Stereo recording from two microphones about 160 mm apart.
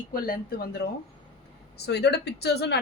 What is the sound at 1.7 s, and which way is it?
Speech, 90° left.